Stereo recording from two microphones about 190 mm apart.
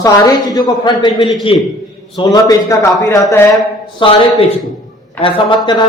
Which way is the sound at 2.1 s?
20° left (ahead or behind).